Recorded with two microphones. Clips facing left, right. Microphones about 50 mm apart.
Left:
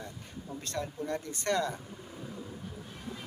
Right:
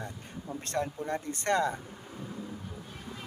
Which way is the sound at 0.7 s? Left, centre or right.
Right.